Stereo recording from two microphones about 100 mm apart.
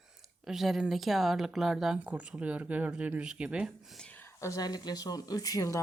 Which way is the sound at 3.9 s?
15° left (ahead or behind).